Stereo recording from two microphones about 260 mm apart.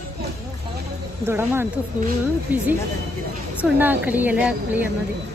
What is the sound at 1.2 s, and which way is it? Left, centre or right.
A woman's voice, centre.